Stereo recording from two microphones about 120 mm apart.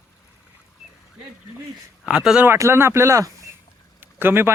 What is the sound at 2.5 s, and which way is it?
Speech, 20° right (ahead or behind).